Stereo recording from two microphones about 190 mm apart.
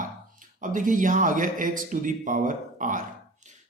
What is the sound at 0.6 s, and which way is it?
A man's voice, 45° right (ahead or behind).